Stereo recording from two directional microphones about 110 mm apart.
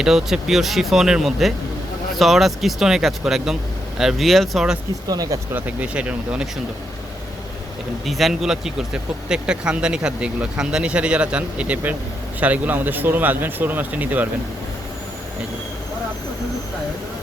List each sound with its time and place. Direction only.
0.0 s speech: 5° right (ahead or behind)
5.0 s speech: 35° right (ahead or behind)
5.5 s speech: 15° right (ahead or behind)
8.0 s speech: centre (ahead or behind)